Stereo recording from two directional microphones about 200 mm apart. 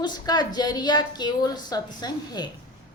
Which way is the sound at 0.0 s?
20° left (ahead or behind).